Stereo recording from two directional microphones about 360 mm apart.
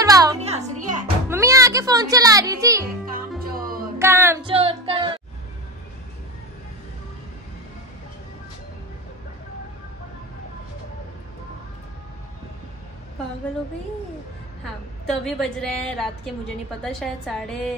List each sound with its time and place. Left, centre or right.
0.0 s music: centre
1.3 s music: centre
3.1 s music: right
4.0 s music: centre
15.0 s a woman's voice: centre